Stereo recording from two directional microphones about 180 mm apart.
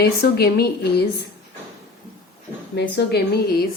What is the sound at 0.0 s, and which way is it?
A woman's voice, 60° left (ahead or behind).